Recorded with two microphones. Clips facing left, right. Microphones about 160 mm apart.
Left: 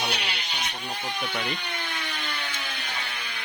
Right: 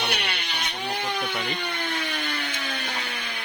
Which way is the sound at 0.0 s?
60° right (ahead or behind).